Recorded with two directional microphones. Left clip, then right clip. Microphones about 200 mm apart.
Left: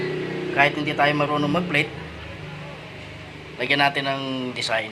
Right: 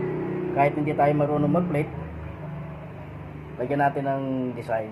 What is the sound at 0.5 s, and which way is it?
Speech, 40° left (ahead or behind).